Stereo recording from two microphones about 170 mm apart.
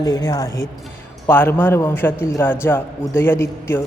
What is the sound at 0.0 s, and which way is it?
A man's voice, 20° left (ahead or behind).